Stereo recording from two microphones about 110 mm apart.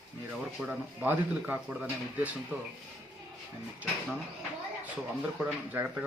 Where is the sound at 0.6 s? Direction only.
20° right (ahead or behind).